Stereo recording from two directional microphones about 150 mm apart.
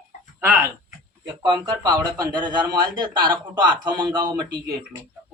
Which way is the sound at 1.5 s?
30° right (ahead or behind).